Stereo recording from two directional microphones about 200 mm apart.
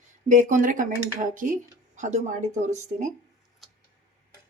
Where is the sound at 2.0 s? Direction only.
35° right (ahead or behind).